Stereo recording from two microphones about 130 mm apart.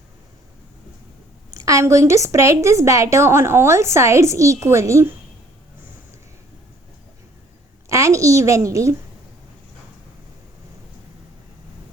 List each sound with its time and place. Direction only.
1.5 s a woman's voice: 25° right (ahead or behind)
7.9 s a child's voice: 25° right (ahead or behind)